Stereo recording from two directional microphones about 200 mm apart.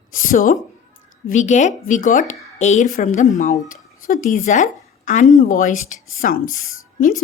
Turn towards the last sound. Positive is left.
turn(degrees=40)  # may be behind; listen again after turning